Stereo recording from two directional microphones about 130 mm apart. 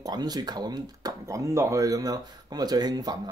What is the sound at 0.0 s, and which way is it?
Speech, 30° right (ahead or behind).